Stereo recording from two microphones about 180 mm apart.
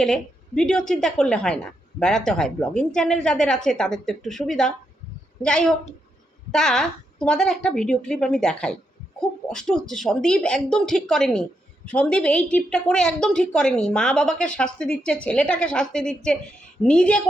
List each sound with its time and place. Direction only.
0.0 s a woman's voice: 5° left (ahead or behind)